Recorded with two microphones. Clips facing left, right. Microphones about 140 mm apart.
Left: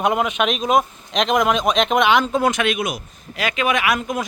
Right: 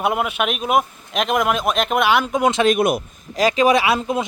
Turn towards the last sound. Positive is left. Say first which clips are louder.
# right 3 dB
turn(degrees=-30)  # may be behind; listen again after turning